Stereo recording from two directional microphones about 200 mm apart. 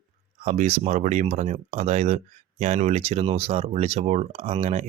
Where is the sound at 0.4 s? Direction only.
30° right (ahead or behind).